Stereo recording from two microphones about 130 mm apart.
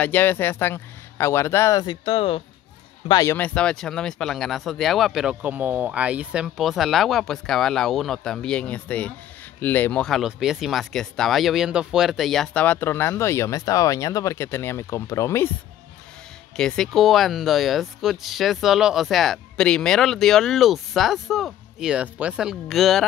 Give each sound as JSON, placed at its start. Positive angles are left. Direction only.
{"t": 0.0, "sound": "speech", "side_deg": 15}
{"t": 3.1, "sound": "speech", "side_deg": 25}
{"t": 3.3, "sound": "speech", "side_deg": 10}
{"t": 10.0, "sound": "speech", "side_deg": 0}
{"t": 12.6, "sound": "speech", "side_deg": 15}
{"t": 16.5, "sound": "speech", "side_deg": 5}